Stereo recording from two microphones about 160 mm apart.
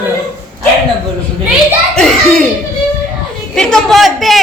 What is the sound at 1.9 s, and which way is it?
Speech, 5° left (ahead or behind).